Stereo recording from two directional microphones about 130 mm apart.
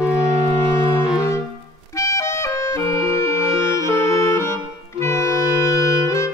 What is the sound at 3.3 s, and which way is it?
Music, 20° left (ahead or behind).